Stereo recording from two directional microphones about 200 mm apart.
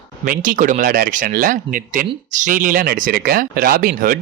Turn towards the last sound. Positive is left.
turn(degrees=-45)  # may be behind; listen again after turning